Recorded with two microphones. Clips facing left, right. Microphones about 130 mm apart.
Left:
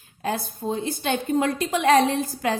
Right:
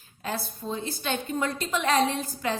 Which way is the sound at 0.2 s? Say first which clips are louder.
Left 5 dB; 45° left (ahead or behind).